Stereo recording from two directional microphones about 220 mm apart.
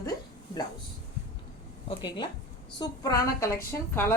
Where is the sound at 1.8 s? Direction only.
20° left (ahead or behind).